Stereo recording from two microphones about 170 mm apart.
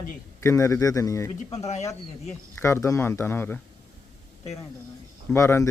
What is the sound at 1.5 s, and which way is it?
Speech, 40° left (ahead or behind).